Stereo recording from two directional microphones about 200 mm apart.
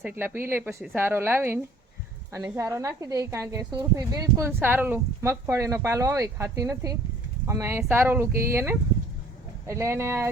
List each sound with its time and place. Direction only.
0.0 s speech: 10° right (ahead or behind)